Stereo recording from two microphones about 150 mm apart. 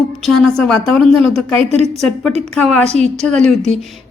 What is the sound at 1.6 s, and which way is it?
Speech, 45° right (ahead or behind).